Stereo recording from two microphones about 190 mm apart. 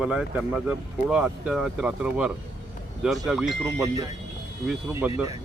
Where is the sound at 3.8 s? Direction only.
20° right (ahead or behind).